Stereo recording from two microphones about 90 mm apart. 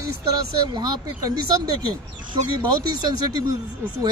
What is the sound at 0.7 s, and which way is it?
Speech, 55° right (ahead or behind).